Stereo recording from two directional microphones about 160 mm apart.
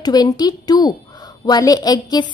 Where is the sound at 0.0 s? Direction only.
25° left (ahead or behind).